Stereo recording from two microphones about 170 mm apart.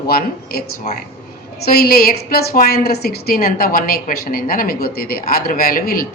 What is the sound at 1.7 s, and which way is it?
A woman's voice, 65° left (ahead or behind).